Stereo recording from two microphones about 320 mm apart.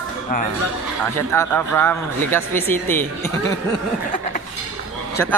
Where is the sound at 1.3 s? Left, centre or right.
Centre.